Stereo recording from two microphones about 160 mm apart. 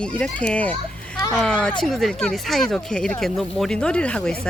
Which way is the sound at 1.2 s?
20° left (ahead or behind).